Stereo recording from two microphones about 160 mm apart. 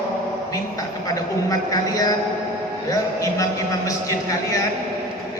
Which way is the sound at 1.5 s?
20° left (ahead or behind).